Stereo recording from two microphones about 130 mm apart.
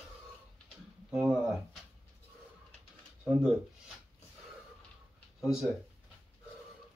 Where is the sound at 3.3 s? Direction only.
10° right (ahead or behind).